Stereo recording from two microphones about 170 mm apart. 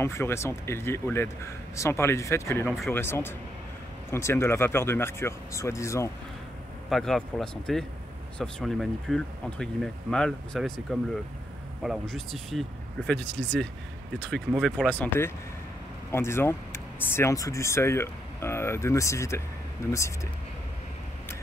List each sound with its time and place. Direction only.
0.0 s speech: 15° left (ahead or behind)
6.9 s speech: centre (ahead or behind)